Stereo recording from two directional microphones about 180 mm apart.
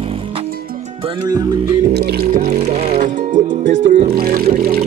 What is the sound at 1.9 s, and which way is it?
Speech, 60° right (ahead or behind).